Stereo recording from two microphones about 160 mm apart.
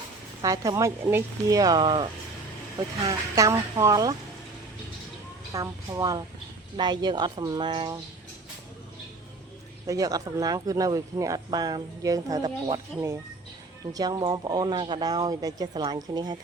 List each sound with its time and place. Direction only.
0.4 s speech: 20° right (ahead or behind)
3.1 s speech: 20° right (ahead or behind)
5.5 s speech: 25° right (ahead or behind)
9.8 s speech: 20° right (ahead or behind)
13.9 s speech: 25° right (ahead or behind)